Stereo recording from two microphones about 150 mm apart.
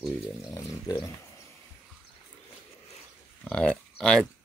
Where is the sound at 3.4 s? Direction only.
5° left (ahead or behind).